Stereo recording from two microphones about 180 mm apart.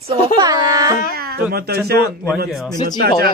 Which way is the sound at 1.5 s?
60° right (ahead or behind).